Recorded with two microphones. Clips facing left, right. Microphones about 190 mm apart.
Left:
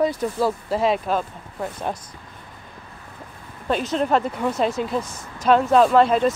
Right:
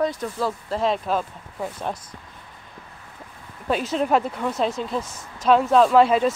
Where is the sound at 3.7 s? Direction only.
5° right (ahead or behind).